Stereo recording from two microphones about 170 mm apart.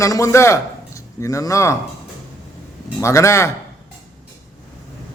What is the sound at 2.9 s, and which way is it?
Speech, 15° left (ahead or behind).